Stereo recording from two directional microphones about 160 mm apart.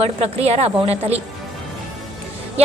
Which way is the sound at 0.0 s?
40° right (ahead or behind).